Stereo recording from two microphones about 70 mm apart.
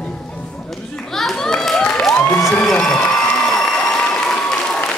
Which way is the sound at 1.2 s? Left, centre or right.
Centre.